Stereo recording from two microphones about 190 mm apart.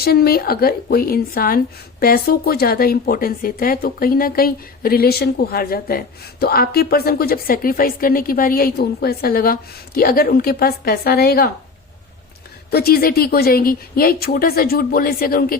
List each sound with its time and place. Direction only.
0.0 s speech: 55° left (ahead or behind)
12.7 s speech: 55° left (ahead or behind)